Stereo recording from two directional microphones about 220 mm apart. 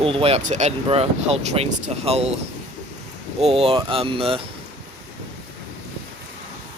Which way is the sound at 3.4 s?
25° right (ahead or behind).